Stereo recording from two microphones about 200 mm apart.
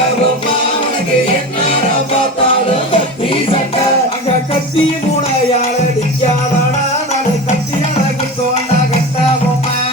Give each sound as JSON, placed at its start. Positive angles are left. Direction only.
{"t": 2.9, "sound": "music", "side_deg": 25}